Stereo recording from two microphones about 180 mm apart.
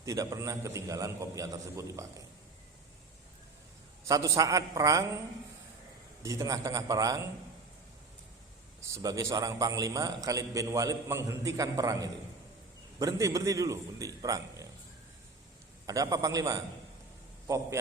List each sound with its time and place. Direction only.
0.0 s a man's voice: 15° right (ahead or behind)
4.0 s a man's voice: 15° right (ahead or behind)
6.2 s a man's voice: 20° right (ahead or behind)
8.8 s a man's voice: 20° right (ahead or behind)
15.9 s a man's voice: 20° right (ahead or behind)